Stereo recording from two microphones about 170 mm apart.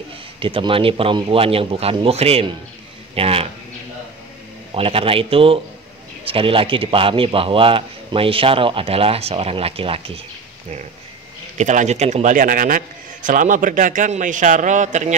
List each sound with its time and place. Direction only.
0.4 s a man's voice: 30° right (ahead or behind)
4.7 s a man's voice: 35° right (ahead or behind)
11.5 s a man's voice: 45° right (ahead or behind)